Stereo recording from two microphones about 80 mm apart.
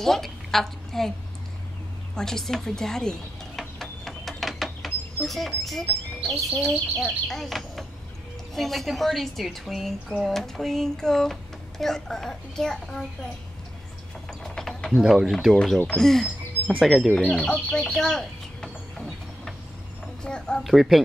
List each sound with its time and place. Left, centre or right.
0.0 s a woman's voice: centre
2.1 s a sound: centre
5.2 s speech: centre
7.1 s speech: centre
14.5 s a sound: centre
15.5 s speech: centre
17.3 s speech: centre
17.9 s a sound: centre
20.2 s speech: centre
20.6 s speech: centre